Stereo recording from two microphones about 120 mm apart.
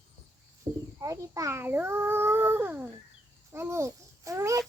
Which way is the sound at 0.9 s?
25° right (ahead or behind).